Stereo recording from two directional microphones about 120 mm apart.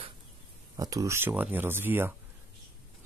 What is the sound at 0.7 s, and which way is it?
Speech, 30° right (ahead or behind).